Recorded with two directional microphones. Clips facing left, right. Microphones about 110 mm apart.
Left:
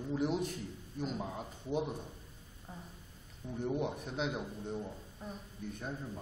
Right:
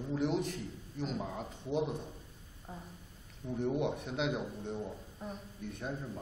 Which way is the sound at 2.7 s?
10° right (ahead or behind).